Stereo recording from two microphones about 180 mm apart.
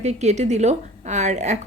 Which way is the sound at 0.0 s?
40° right (ahead or behind).